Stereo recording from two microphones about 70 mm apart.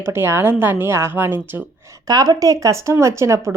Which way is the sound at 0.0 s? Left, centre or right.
Right.